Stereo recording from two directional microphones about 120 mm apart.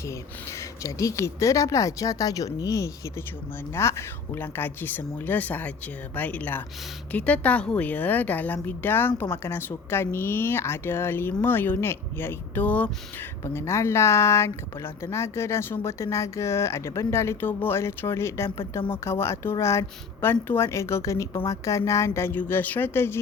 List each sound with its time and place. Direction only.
0.0 s a woman's voice: 25° left (ahead or behind)